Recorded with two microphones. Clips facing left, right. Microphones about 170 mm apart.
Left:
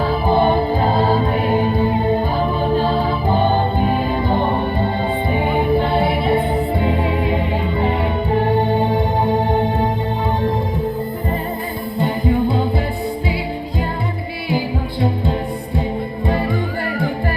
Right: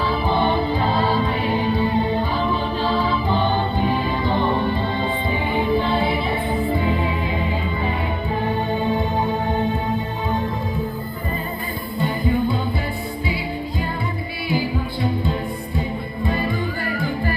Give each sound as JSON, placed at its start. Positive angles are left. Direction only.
{"t": 0.0, "sound": "music", "side_deg": 45}
{"t": 11.9, "sound": "music", "side_deg": 75}
{"t": 16.2, "sound": "music", "side_deg": 65}